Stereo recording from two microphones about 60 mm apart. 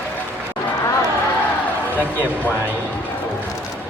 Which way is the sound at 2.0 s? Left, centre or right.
Left.